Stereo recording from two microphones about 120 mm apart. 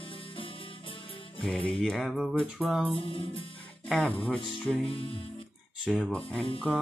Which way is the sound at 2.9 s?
50° left (ahead or behind).